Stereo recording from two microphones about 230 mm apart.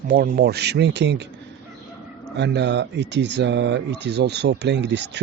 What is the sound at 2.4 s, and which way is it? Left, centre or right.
Speech, right.